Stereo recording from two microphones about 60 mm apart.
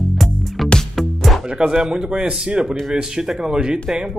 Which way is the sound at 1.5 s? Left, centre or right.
Centre.